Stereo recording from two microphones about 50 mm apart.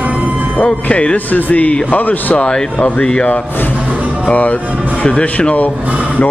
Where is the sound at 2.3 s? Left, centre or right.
Centre.